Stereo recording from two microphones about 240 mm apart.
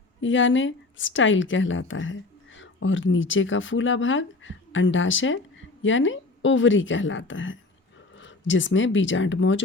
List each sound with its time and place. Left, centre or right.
0.2 s speech: left